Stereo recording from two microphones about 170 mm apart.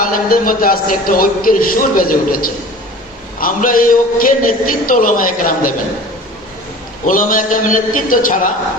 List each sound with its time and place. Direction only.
0.0 s a man's voice: 55° left (ahead or behind)
7.1 s a man's voice: 50° left (ahead or behind)